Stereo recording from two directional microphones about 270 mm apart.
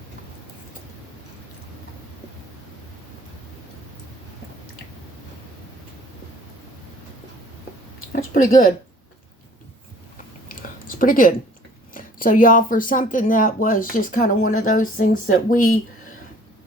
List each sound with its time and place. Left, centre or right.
8.3 s speech: left
10.5 s a sound: left
11.9 s speech: left